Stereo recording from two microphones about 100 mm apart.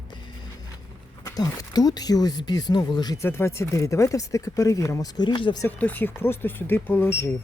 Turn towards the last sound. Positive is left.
turn(degrees=25)  # may be behind; listen again after turning